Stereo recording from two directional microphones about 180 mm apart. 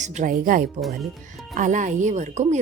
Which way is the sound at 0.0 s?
40° right (ahead or behind).